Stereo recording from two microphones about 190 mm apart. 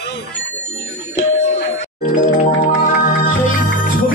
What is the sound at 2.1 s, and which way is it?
Music, 45° left (ahead or behind).